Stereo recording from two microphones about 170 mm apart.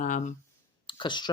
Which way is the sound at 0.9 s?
30° left (ahead or behind).